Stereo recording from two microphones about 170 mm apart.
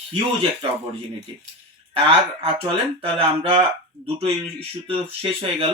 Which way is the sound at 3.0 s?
35° right (ahead or behind).